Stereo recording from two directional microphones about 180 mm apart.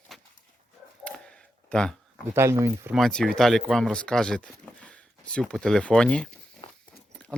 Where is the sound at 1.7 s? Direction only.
5° left (ahead or behind).